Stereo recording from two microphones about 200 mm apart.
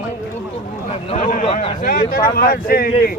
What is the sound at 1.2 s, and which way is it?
Speech, 40° left (ahead or behind).